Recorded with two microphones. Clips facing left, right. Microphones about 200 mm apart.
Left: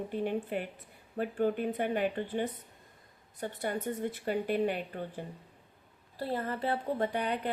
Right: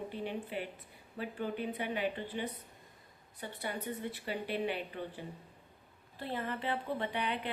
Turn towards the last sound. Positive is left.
turn(degrees=40)  # may be behind; listen again after turning